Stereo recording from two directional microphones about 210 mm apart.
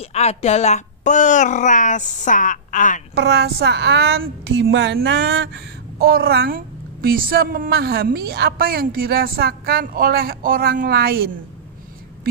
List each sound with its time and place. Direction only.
0.0 s speech: 30° left (ahead or behind)
3.2 s a woman's voice: 50° right (ahead or behind)